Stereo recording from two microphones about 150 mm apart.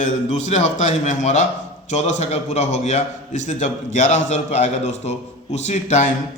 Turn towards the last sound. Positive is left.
turn(degrees=50)  # may be behind; listen again after turning